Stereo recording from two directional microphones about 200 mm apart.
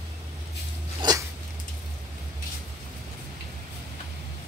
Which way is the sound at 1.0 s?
20° right (ahead or behind).